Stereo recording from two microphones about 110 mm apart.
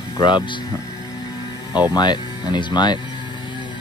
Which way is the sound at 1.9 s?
40° left (ahead or behind).